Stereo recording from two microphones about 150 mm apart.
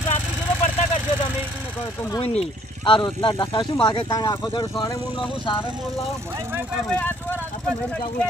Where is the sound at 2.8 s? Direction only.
35° left (ahead or behind).